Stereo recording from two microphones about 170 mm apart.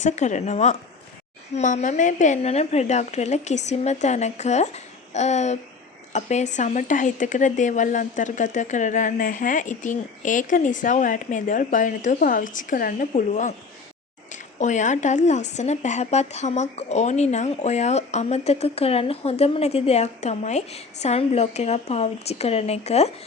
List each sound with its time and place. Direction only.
0.0 s speech: 45° left (ahead or behind)